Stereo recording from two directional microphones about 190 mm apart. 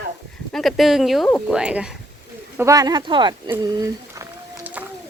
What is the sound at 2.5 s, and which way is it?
Speech, 15° right (ahead or behind).